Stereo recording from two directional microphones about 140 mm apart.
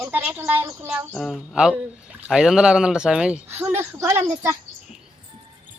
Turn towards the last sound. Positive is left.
turn(degrees=-20)  # may be behind; listen again after turning